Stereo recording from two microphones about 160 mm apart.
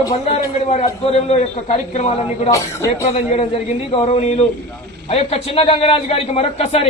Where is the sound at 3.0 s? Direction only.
40° left (ahead or behind).